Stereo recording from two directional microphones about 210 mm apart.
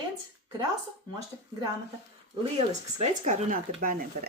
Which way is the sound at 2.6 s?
35° right (ahead or behind).